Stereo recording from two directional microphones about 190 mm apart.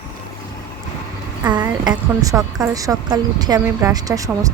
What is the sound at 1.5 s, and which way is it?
A woman's voice, 20° right (ahead or behind).